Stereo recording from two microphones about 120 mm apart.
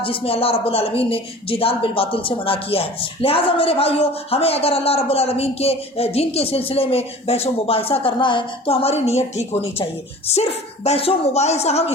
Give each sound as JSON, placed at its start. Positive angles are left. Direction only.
{"t": 0.0, "sound": "speech", "side_deg": 50}